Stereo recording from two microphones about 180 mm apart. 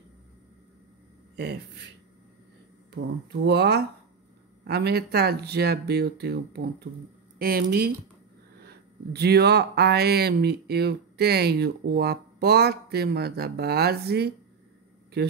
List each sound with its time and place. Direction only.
1.3 s speech: 70° right (ahead or behind)
3.4 s speech: 65° right (ahead or behind)